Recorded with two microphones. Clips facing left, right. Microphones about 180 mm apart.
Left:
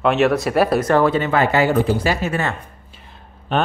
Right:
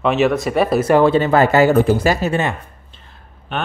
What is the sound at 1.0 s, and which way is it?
Speech, 30° right (ahead or behind).